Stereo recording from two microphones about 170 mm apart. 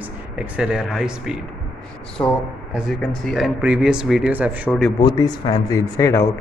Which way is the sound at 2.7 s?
5° right (ahead or behind).